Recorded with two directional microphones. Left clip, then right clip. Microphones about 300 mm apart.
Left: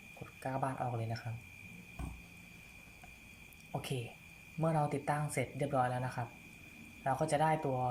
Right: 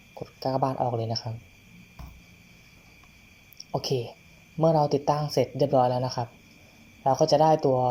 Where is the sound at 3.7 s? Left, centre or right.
Centre.